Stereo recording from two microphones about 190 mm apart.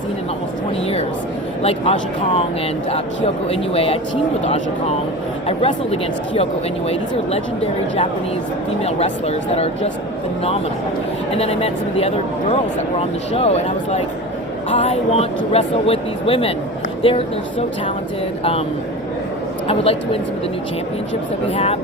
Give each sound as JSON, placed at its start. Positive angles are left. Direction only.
{"t": 1.6, "sound": "speech", "side_deg": 30}
{"t": 5.5, "sound": "speech", "side_deg": 30}
{"t": 11.3, "sound": "speech", "side_deg": 30}
{"t": 19.6, "sound": "speech", "side_deg": 30}
{"t": 21.5, "sound": "speech", "side_deg": 35}